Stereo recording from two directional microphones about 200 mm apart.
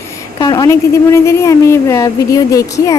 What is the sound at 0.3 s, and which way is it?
A woman's voice, 20° left (ahead or behind).